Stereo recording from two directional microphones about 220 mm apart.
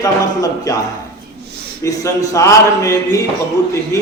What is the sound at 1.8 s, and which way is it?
A man's voice, 15° left (ahead or behind).